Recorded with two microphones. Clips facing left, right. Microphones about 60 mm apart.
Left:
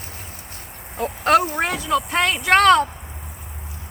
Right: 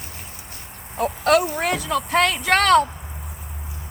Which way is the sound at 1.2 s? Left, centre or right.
Left.